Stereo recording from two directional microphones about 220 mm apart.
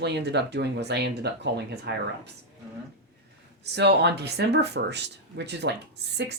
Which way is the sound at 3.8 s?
50° right (ahead or behind).